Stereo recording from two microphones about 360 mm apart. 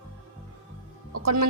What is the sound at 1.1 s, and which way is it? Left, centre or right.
Speech, right.